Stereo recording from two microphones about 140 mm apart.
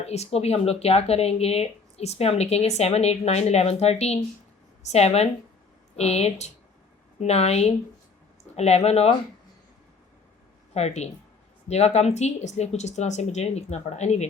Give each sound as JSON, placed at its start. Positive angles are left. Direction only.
{"t": 0.0, "sound": "speech", "side_deg": 50}
{"t": 10.8, "sound": "speech", "side_deg": 50}